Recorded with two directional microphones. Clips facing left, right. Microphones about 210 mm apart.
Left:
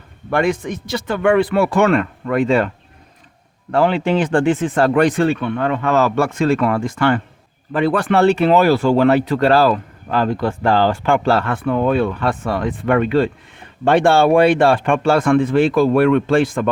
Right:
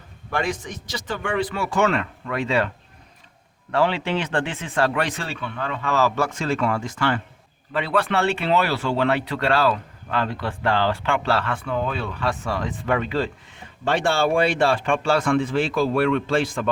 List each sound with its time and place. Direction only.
0.3 s speech: 60° left (ahead or behind)
3.8 s speech: 45° left (ahead or behind)